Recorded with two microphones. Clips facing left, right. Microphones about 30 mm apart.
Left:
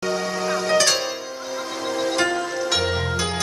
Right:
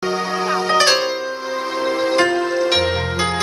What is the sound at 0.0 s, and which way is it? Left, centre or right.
Music, right.